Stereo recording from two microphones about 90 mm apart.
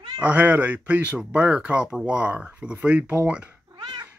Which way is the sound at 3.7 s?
50° right (ahead or behind).